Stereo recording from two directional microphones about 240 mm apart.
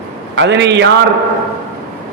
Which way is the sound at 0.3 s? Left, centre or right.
Right.